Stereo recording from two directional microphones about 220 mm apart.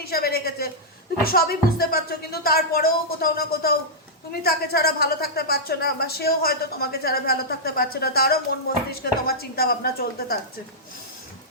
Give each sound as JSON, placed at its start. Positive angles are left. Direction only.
{"t": 0.0, "sound": "a woman's voice", "side_deg": 45}